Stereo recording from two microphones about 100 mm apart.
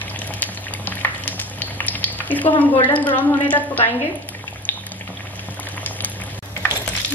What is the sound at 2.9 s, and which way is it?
Speech, 20° left (ahead or behind).